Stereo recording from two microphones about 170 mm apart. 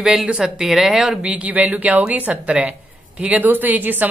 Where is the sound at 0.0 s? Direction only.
5° right (ahead or behind).